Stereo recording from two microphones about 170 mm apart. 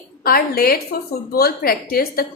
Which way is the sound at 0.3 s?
60° left (ahead or behind).